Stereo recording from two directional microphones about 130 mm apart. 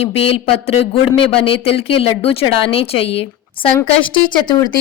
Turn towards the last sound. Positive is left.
turn(degrees=35)  # may be behind; listen again after turning